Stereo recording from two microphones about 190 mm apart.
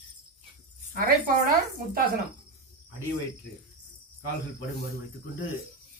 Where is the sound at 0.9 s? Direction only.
45° right (ahead or behind).